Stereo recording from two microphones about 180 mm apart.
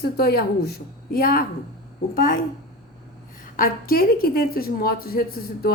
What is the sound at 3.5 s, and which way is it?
Speech, 50° left (ahead or behind).